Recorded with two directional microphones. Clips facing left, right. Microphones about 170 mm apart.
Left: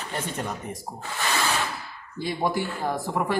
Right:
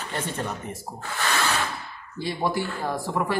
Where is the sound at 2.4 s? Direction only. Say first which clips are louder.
Even; 20° left (ahead or behind).